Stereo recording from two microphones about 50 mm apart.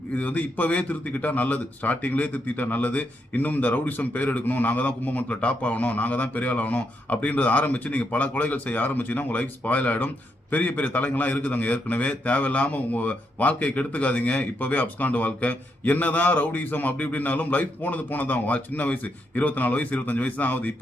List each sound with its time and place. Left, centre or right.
0.1 s a man's voice: left